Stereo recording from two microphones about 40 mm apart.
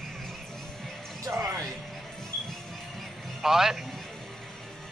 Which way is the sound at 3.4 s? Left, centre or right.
Centre.